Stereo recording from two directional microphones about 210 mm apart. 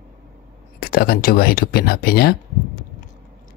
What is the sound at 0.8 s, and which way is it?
Speech, 45° left (ahead or behind).